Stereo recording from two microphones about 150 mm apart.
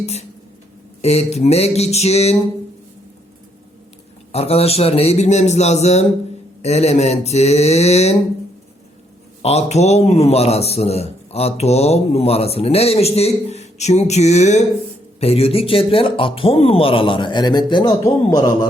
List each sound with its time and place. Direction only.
0.0 s a man's voice: 45° left (ahead or behind)
4.3 s a man's voice: 45° left (ahead or behind)
9.4 s a man's voice: 45° left (ahead or behind); by 18.7 s 25° left (ahead or behind)